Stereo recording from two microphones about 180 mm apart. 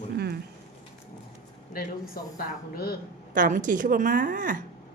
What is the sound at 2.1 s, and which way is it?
Speech, 55° left (ahead or behind).